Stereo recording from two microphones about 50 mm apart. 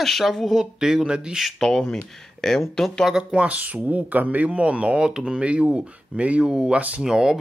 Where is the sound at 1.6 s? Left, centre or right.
Centre.